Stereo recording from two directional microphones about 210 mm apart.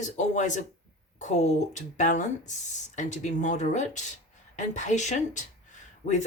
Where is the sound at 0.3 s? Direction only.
35° left (ahead or behind).